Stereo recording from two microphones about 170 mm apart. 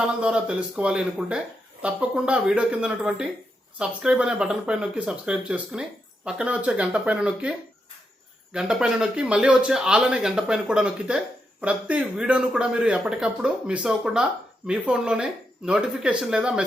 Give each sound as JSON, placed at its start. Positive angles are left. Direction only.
{"t": 0.2, "sound": "speech", "side_deg": -5}
{"t": 8.5, "sound": "speech", "side_deg": -5}